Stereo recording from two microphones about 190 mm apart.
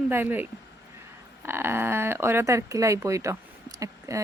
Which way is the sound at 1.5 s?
10° right (ahead or behind).